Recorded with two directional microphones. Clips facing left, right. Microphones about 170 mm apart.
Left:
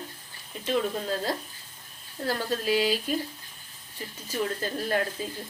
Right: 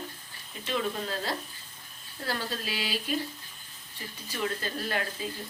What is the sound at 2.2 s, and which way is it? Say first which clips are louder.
Speech: left 6 dB; 45° left (ahead or behind).